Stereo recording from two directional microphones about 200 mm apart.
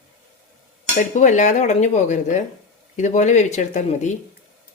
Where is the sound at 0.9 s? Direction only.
40° left (ahead or behind).